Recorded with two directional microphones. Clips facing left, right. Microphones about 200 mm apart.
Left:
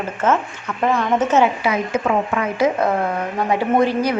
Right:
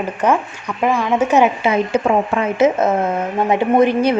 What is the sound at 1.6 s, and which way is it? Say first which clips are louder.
Speech: right 4 dB; 30° right (ahead or behind).